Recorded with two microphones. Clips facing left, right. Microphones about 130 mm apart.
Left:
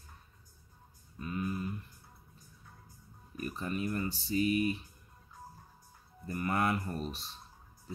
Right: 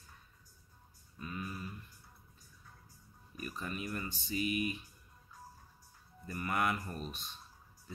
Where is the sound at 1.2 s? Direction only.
25° left (ahead or behind).